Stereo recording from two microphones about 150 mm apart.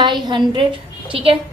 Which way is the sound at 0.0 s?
30° right (ahead or behind).